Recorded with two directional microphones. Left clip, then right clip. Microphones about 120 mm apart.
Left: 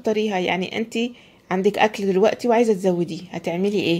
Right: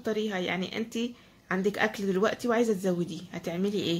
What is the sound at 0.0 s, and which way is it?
Speech, 40° left (ahead or behind).